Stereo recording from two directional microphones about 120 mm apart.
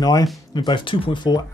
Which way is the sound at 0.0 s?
35° left (ahead or behind).